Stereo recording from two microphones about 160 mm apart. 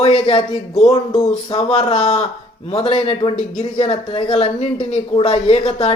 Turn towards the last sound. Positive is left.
turn(degrees=40)  # may be behind; listen again after turning